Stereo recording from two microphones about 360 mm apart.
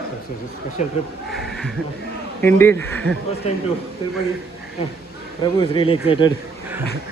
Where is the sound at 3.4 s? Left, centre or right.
Centre.